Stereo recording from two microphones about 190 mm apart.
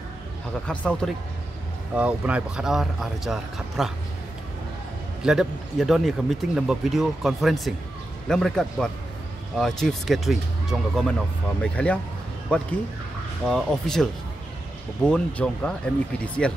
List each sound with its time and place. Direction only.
0.7 s speech: 5° left (ahead or behind)
2.0 s speech: 5° right (ahead or behind)
5.2 s speech: 5° right (ahead or behind)
15.0 s speech: 5° left (ahead or behind)